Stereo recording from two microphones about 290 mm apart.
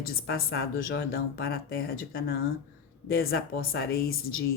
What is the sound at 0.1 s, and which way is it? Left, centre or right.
Speech, left.